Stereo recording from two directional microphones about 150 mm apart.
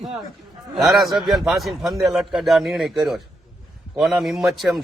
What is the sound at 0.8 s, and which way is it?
A man's voice, centre (ahead or behind).